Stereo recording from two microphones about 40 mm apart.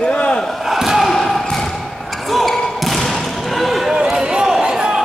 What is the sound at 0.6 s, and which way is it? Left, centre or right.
Crowd, centre.